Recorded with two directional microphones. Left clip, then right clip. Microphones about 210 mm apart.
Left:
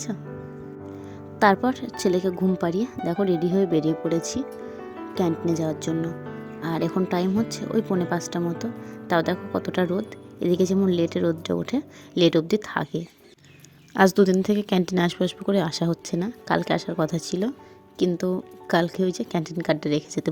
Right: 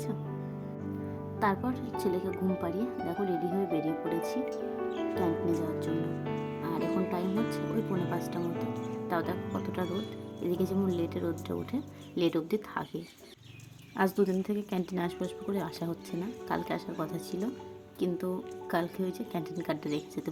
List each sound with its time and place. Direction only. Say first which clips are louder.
1.4 s a woman's voice: left 11 dB; 35° left (ahead or behind)
13.9 s a woman's voice: left 10 dB; 35° left (ahead or behind)